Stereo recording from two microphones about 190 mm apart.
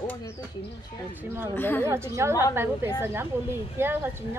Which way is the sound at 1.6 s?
10° left (ahead or behind).